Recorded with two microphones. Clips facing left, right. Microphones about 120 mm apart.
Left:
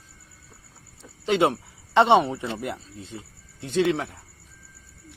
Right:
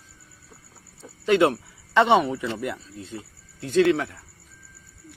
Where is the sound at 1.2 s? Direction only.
25° left (ahead or behind).